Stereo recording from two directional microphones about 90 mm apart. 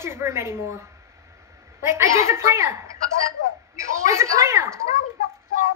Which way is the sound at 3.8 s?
35° right (ahead or behind).